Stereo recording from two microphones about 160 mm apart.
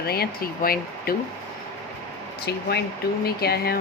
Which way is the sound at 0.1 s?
70° left (ahead or behind).